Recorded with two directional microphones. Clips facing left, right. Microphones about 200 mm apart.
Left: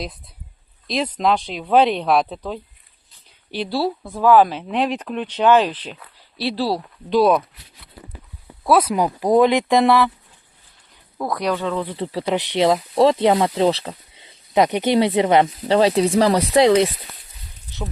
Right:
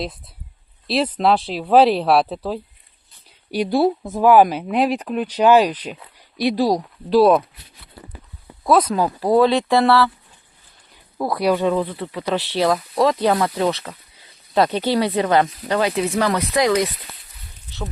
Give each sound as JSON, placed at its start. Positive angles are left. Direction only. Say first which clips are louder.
{"t": 0.9, "sound": "speech", "louder": "right 2 dB", "side_deg": -5}
{"t": 3.6, "sound": "speech", "louder": "right 5 dB", "side_deg": -20}
{"t": 7.1, "sound": "speech", "louder": "right 2 dB", "side_deg": -5}
{"t": 8.6, "sound": "speech", "louder": "even", "side_deg": 10}
{"t": 11.2, "sound": "speech", "louder": "right 3 dB", "side_deg": -5}
{"t": 11.9, "sound": "speech", "louder": "left 1 dB", "side_deg": 25}